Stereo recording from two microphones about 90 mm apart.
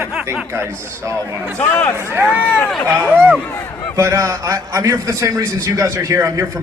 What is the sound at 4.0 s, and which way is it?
A man's voice, 35° right (ahead or behind).